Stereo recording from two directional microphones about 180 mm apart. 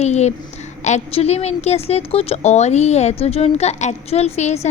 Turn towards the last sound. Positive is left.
turn(degrees=35)  # may be behind; listen again after turning